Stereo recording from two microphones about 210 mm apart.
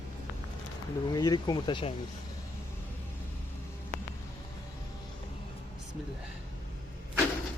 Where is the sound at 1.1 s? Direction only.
20° left (ahead or behind).